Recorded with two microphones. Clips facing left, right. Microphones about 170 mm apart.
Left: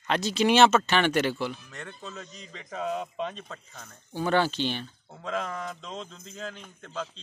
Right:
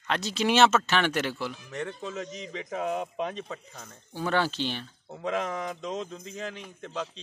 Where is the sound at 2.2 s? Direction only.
90° right.